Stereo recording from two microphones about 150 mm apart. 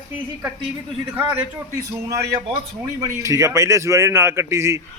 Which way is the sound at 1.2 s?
15° right (ahead or behind).